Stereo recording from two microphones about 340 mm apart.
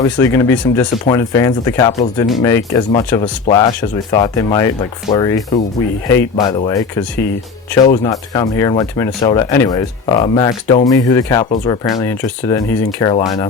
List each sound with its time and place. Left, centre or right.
0.0 s speech: centre